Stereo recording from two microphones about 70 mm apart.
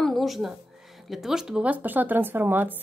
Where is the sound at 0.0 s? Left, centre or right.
Centre.